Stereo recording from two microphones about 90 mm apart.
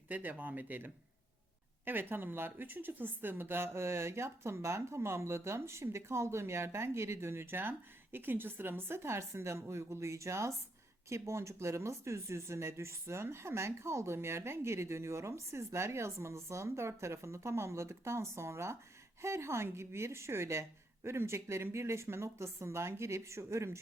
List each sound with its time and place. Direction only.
0.1 s speech: 20° right (ahead or behind)